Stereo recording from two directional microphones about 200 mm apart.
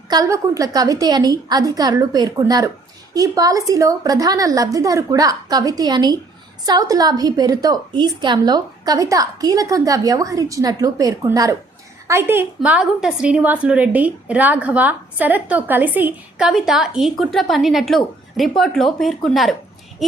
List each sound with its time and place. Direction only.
0.1 s a woman's voice: 15° right (ahead or behind); by 19.5 s centre (ahead or behind)